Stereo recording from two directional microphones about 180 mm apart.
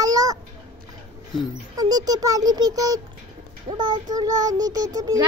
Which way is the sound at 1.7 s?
20° right (ahead or behind).